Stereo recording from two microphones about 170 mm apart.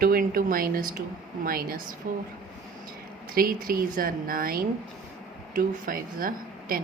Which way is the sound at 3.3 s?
60° right (ahead or behind).